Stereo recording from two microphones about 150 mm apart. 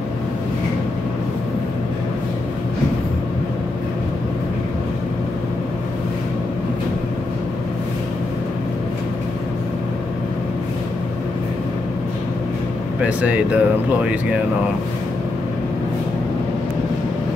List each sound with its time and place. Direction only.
13.0 s speech: 10° right (ahead or behind)